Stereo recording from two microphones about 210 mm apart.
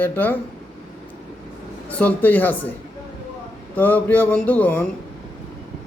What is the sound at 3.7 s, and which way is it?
Speech, 10° left (ahead or behind).